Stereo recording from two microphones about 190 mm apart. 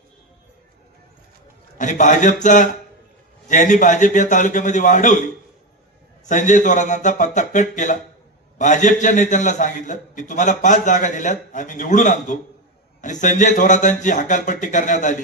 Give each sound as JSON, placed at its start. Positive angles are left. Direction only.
{"t": 1.8, "sound": "a man's voice", "side_deg": 40}